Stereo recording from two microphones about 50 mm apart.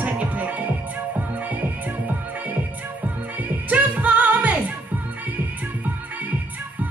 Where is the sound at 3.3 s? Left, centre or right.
Right.